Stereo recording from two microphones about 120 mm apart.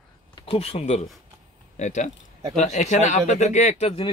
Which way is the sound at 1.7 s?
90° left.